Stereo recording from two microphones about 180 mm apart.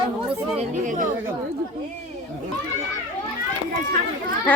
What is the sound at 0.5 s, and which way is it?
Speech, 45° right (ahead or behind).